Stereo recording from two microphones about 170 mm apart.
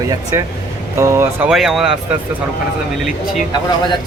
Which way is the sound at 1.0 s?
15° right (ahead or behind).